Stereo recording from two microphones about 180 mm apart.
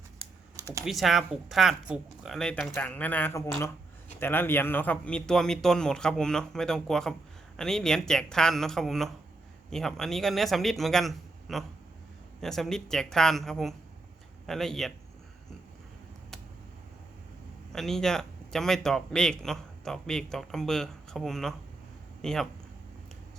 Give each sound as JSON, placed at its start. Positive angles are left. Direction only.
{"t": 0.2, "sound": "typing", "side_deg": -15}
{"t": 0.9, "sound": "a man's voice", "side_deg": 0}
{"t": 17.7, "sound": "a man's voice", "side_deg": 0}